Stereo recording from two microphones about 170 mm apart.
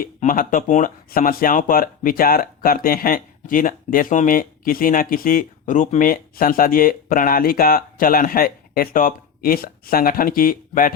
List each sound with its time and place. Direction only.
0.0 s speech: 55° left (ahead or behind)